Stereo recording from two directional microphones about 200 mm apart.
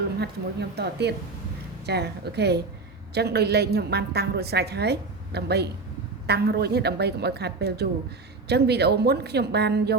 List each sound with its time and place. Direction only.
0.2 s a woman's voice: 55° right (ahead or behind)